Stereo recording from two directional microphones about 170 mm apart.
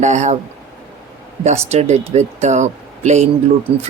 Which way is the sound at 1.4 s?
40° right (ahead or behind).